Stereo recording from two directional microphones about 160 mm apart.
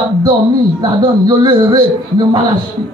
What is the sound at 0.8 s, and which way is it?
Speech, 25° right (ahead or behind).